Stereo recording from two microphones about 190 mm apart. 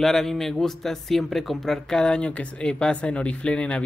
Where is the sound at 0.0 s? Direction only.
Centre (ahead or behind).